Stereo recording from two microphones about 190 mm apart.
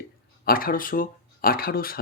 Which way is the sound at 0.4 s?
50° left (ahead or behind).